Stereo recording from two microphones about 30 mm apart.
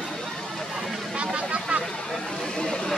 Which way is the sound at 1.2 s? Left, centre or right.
Right.